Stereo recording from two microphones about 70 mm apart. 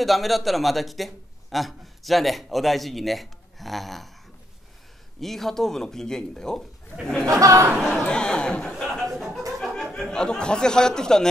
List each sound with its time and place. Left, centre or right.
0.0 s a man's voice: centre
5.2 s speech: centre
7.2 s speech: right
7.8 s a sound: centre
9.9 s speech: centre